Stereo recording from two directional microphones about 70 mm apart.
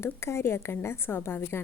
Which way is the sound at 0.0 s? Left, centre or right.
Left.